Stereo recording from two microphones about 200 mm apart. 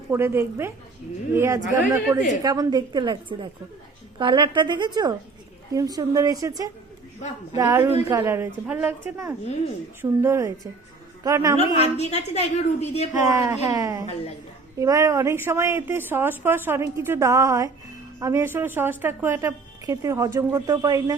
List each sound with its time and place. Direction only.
0.1 s a woman's voice: 10° right (ahead or behind)
11.5 s a woman's voice: 30° left (ahead or behind)
13.1 s a woman's voice: 15° right (ahead or behind)